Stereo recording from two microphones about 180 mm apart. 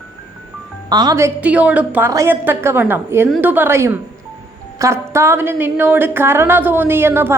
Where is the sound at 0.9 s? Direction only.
20° right (ahead or behind).